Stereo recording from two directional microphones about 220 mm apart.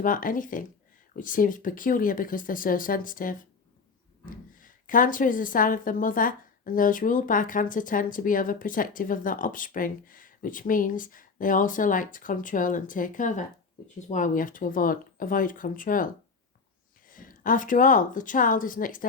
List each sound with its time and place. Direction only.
0.0 s a woman's voice: 40° left (ahead or behind)
4.5 s a woman's voice: 40° left (ahead or behind)
17.1 s speech: 40° left (ahead or behind)